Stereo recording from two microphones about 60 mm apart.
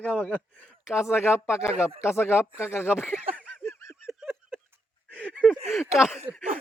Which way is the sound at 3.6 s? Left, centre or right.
Left.